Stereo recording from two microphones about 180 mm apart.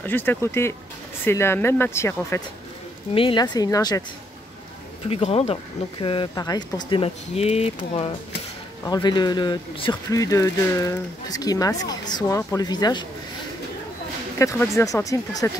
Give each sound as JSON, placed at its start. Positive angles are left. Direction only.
{"t": 0.0, "sound": "speech", "side_deg": 10}
{"t": 3.2, "sound": "speech", "side_deg": 25}
{"t": 5.1, "sound": "speech", "side_deg": 35}
{"t": 8.8, "sound": "speech", "side_deg": 25}
{"t": 14.4, "sound": "speech", "side_deg": 15}